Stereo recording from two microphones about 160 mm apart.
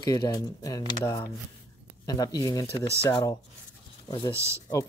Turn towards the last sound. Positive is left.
turn(degrees=-15)  # may be behind; listen again after turning